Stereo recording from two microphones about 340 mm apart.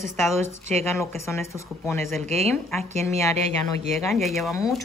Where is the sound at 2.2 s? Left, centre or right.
Centre.